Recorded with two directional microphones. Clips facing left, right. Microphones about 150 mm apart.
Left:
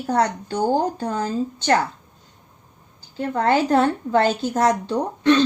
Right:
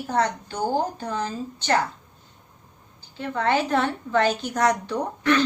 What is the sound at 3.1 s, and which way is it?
A woman's voice, 40° left (ahead or behind).